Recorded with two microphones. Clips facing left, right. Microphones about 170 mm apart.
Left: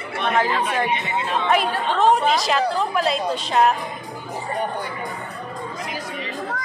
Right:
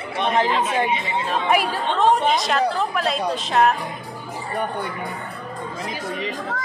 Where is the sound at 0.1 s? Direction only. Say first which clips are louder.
Right 1 dB; 20° right (ahead or behind).